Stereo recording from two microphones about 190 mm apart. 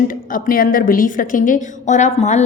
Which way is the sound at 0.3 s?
50° left (ahead or behind).